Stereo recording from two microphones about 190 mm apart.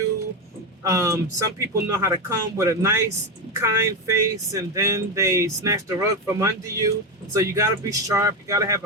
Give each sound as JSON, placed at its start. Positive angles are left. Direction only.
{"t": 0.9, "sound": "speech", "side_deg": -15}